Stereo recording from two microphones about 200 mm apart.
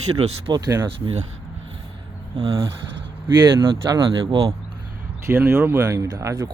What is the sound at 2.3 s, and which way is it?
Speech, 20° right (ahead or behind).